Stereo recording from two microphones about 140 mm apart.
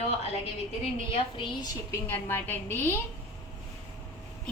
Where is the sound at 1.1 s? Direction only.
35° left (ahead or behind).